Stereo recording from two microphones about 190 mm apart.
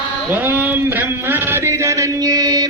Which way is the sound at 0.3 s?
10° right (ahead or behind).